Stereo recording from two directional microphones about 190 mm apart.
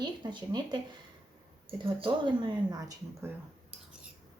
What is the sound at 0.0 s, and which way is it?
Speech, 25° right (ahead or behind).